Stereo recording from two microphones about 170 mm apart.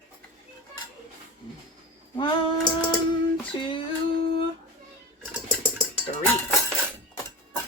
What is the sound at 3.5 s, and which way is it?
Female singing, 25° left (ahead or behind).